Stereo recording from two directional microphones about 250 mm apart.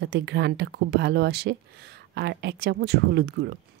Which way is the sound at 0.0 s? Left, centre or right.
Right.